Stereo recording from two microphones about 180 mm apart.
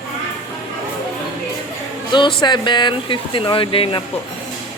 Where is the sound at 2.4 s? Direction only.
25° left (ahead or behind).